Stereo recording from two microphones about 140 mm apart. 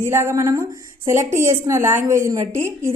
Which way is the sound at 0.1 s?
20° right (ahead or behind).